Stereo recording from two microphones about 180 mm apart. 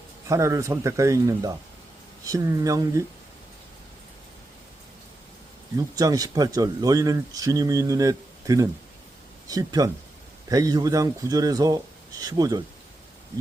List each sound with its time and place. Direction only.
0.3 s a man's voice: 15° right (ahead or behind)
5.7 s speech: 20° right (ahead or behind)